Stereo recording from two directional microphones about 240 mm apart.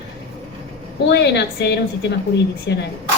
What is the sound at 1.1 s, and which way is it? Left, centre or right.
A woman's voice, left.